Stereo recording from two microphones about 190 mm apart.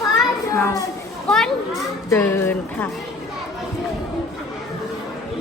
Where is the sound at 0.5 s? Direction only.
15° left (ahead or behind).